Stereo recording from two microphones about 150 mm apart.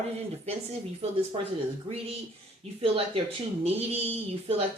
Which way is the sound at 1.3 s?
40° right (ahead or behind).